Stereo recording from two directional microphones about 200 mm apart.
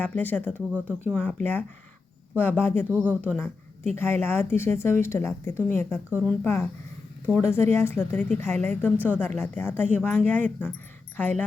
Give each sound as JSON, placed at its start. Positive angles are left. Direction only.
{"t": 0.0, "sound": "speech", "side_deg": 10}
{"t": 0.7, "sound": "speech", "side_deg": -10}
{"t": 1.1, "sound": "speech", "side_deg": 5}
{"t": 2.9, "sound": "speech", "side_deg": -5}
{"t": 3.9, "sound": "speech", "side_deg": 10}
{"t": 6.1, "sound": "speech", "side_deg": -5}
{"t": 6.4, "sound": "speech", "side_deg": 15}